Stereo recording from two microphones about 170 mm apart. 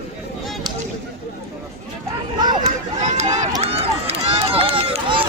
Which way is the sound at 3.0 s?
40° right (ahead or behind).